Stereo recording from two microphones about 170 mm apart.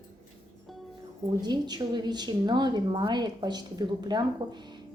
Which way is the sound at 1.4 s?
25° right (ahead or behind).